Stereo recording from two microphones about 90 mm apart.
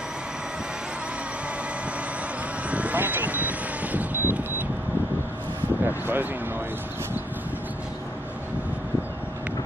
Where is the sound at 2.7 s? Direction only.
15° right (ahead or behind).